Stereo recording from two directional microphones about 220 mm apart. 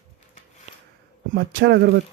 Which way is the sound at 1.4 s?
50° right (ahead or behind).